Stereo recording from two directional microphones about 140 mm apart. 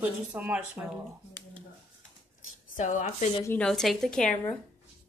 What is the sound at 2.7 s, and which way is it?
Speech, 65° left (ahead or behind).